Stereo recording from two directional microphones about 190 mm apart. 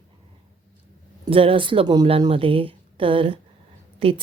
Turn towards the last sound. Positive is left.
turn(degrees=-30)  # may be behind; listen again after turning